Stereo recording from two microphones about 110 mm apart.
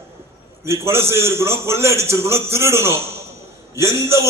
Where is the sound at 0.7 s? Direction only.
25° right (ahead or behind).